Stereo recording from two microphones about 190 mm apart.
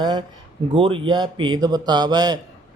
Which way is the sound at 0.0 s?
25° right (ahead or behind).